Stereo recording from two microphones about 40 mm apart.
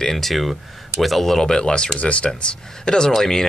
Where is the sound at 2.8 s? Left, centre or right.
Centre.